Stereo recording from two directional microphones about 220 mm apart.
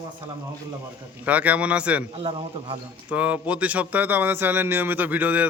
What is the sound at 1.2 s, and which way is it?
Speech, 5° right (ahead or behind).